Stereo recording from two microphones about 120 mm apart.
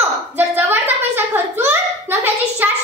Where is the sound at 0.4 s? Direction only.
15° right (ahead or behind).